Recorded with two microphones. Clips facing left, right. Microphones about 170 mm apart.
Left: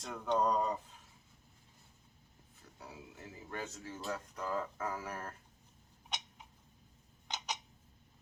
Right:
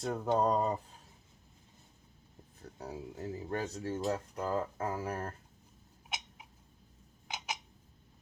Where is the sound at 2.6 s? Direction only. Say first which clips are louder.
Right 9 dB; 40° right (ahead or behind).